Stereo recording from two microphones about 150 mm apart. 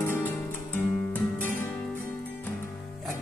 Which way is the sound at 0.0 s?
15° left (ahead or behind).